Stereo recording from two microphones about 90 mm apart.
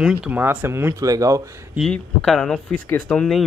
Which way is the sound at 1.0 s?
40° right (ahead or behind).